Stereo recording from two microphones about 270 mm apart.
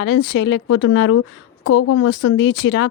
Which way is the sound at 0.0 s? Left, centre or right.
Left.